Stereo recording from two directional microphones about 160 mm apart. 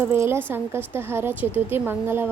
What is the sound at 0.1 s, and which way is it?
A woman's voice, 15° right (ahead or behind).